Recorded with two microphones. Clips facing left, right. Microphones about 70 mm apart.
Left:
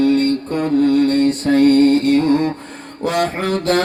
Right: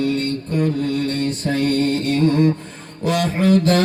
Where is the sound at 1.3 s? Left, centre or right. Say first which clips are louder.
Left 7 dB; left.